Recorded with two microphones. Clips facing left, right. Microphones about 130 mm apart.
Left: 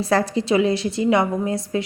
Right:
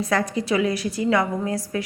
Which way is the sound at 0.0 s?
30° left (ahead or behind).